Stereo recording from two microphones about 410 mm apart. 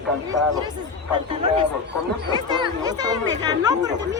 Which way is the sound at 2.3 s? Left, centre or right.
Centre.